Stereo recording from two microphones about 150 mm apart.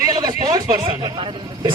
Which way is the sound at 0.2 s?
25° right (ahead or behind).